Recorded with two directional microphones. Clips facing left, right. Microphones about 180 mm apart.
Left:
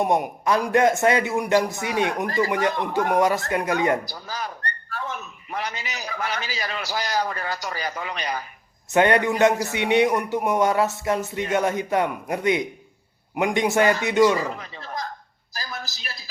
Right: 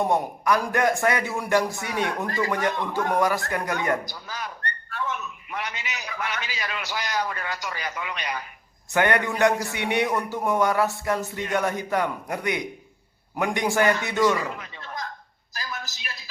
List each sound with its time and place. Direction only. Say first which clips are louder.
0.0 s a man's voice: left 2 dB; 15° left (ahead or behind)
4.1 s a man's voice: left 3 dB; 35° left (ahead or behind)
8.9 s a man's voice: left 4 dB; 25° left (ahead or behind)
14.3 s speech: left 3 dB; 35° left (ahead or behind)
15.5 s a sound: left 1 dB; 35° left (ahead or behind)